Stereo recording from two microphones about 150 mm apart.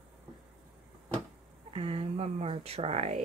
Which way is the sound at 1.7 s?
40° right (ahead or behind).